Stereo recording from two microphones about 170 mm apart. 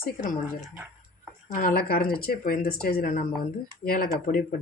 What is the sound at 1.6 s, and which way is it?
Speech, 60° left (ahead or behind).